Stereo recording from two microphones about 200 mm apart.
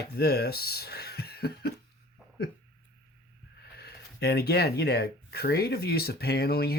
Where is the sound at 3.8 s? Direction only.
55° left (ahead or behind).